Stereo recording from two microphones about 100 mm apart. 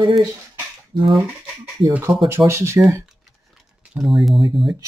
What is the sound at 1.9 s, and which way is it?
Speech, 25° right (ahead or behind).